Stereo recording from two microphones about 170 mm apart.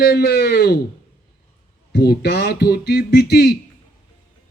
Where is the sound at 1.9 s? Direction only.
70° left (ahead or behind).